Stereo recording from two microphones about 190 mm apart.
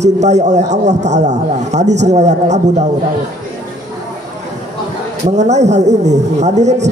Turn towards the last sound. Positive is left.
turn(degrees=-35)  # may be behind; listen again after turning